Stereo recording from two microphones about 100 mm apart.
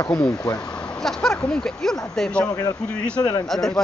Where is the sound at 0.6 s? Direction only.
10° left (ahead or behind).